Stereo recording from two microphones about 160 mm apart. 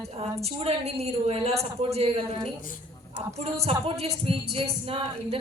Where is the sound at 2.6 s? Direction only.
60° left (ahead or behind).